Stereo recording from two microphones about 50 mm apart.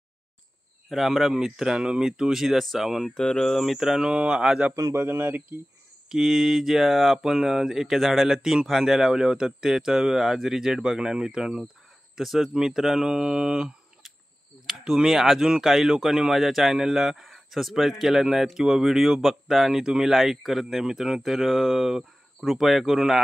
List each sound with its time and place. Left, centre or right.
0.8 s speech: centre
3.2 s speech: centre
4.1 s speech: right
4.7 s a man's voice: right
5.0 s speech: right
6.0 s speech: centre